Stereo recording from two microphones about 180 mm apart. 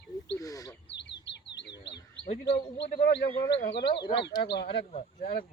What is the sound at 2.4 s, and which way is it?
Speech, 70° left (ahead or behind).